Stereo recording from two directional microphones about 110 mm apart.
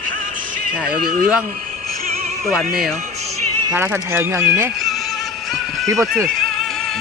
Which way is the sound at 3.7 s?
20° right (ahead or behind).